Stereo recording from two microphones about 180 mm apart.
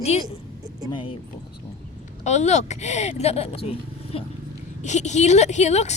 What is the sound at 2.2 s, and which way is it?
A woman's voice, 40° left (ahead or behind).